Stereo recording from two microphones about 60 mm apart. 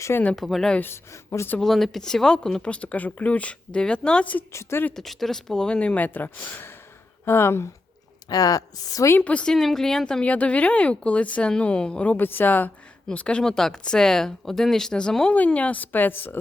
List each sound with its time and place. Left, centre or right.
0.3 s speech: centre
1.1 s speech: left
1.5 s speech: centre; by 4.4 s left
4.9 s speech: centre; by 6.7 s left
7.3 s speech: left
8.3 s a woman's voice: left
9.2 s speech: left
9.5 s speech: centre
12.1 s a woman's voice: left
13.1 s a woman's voice: centre; by 16.4 s left